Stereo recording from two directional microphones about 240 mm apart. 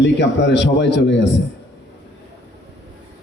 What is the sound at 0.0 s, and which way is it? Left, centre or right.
A man's voice, left.